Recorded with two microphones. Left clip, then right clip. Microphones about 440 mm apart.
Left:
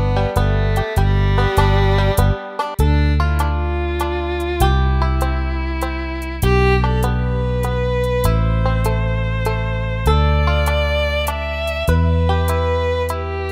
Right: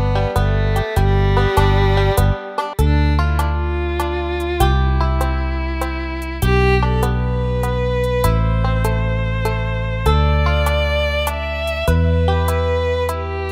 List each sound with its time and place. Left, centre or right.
1.0 s music: left
6.5 s music: left